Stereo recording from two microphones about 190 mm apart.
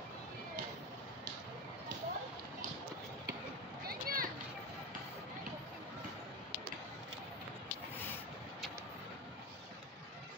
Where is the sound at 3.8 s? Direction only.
50° right (ahead or behind).